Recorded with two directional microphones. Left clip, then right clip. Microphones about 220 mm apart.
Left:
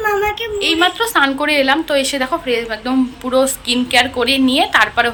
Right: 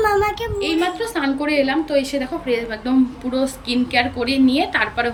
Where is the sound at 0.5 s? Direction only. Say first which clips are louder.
Left 9 dB; 5° right (ahead or behind).